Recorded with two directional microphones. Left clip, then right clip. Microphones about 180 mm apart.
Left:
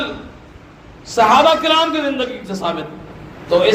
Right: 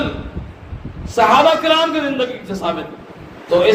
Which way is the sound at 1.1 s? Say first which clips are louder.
Even; 25° left (ahead or behind).